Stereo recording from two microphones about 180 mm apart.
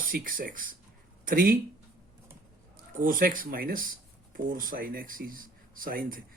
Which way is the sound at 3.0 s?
50° right (ahead or behind).